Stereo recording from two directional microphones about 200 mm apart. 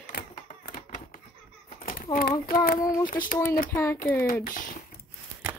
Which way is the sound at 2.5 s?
45° left (ahead or behind).